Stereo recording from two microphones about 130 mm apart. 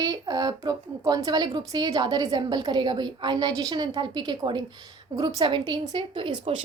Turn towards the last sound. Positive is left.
turn(degrees=-40)  # may be behind; listen again after turning